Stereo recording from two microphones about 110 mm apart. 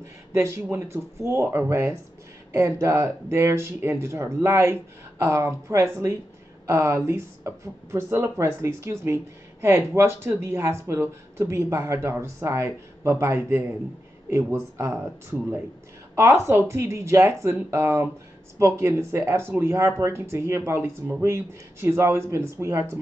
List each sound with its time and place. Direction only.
0.3 s speech: 25° right (ahead or behind)
16.2 s speech: 20° right (ahead or behind)